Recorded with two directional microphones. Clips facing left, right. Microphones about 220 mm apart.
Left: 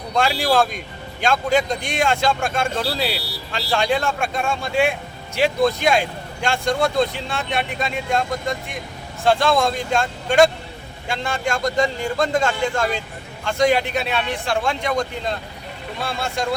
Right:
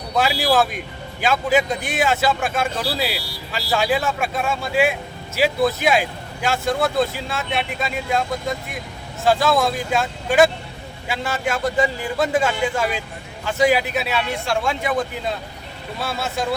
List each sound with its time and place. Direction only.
0.1 s a man's voice: 5° right (ahead or behind)